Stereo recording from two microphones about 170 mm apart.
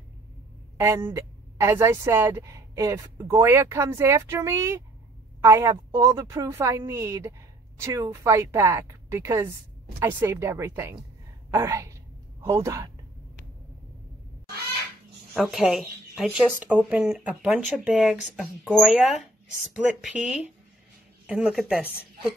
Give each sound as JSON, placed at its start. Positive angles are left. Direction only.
{"t": 0.7, "sound": "a woman's voice", "side_deg": -15}
{"t": 11.5, "sound": "a sound", "side_deg": -15}
{"t": 15.3, "sound": "speech", "side_deg": 0}